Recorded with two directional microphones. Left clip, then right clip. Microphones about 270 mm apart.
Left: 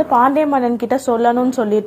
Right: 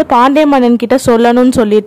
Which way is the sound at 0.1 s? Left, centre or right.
Right.